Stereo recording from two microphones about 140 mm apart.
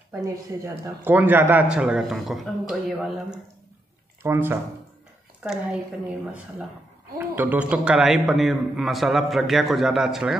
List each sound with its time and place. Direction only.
0.8 s a man's voice: 15° right (ahead or behind)
4.2 s a man's voice: 15° right (ahead or behind)
7.2 s a man's voice: 10° right (ahead or behind)